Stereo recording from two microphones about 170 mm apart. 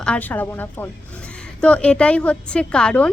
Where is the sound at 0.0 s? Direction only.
10° left (ahead or behind).